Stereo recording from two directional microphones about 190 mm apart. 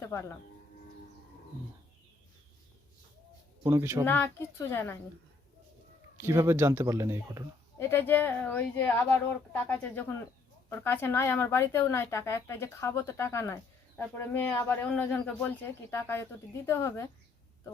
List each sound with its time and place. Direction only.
0.0 s a woman's voice: 15° left (ahead or behind)
3.7 s a man's voice: 15° right (ahead or behind)
4.0 s a woman's voice: 10° left (ahead or behind)
6.1 s a man's voice: 15° right (ahead or behind)
7.8 s a woman's voice: 10° left (ahead or behind)